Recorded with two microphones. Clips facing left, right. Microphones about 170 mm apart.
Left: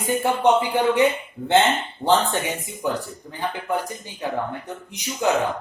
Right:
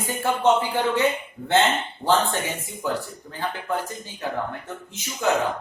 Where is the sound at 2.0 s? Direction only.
20° left (ahead or behind).